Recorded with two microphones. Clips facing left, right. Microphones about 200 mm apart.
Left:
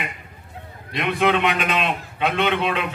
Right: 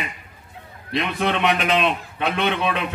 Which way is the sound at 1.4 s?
55° left (ahead or behind).